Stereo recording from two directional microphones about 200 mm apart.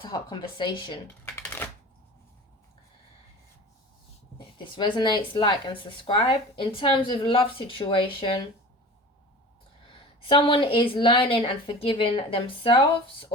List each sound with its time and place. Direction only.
0.0 s speech: 20° left (ahead or behind)
1.2 s shuffling cards: 10° left (ahead or behind)
4.5 s speech: 25° left (ahead or behind)
10.2 s speech: 25° left (ahead or behind)